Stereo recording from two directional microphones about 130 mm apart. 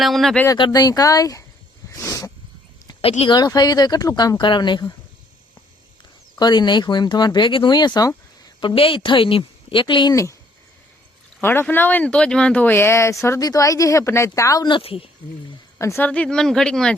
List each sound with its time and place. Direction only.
0.0 s speech: centre (ahead or behind)
0.4 s speech: 30° left (ahead or behind)
1.9 s wild animals: 25° left (ahead or behind)
3.0 s speech: 45° left (ahead or behind)
6.4 s speech: 35° left (ahead or behind)
8.6 s speech: 45° left (ahead or behind)
11.3 s speech: 15° left (ahead or behind)
14.7 s speech: 45° left (ahead or behind)
15.8 s speech: 20° left (ahead or behind)
16.0 s speech: 10° left (ahead or behind)